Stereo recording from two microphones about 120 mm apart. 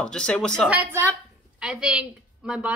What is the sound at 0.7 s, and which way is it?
A woman's voice, 15° right (ahead or behind).